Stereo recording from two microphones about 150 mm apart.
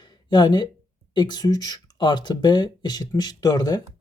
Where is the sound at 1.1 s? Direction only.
30° left (ahead or behind).